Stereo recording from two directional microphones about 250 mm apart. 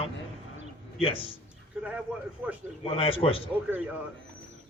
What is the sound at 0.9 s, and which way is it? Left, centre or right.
Speech, left.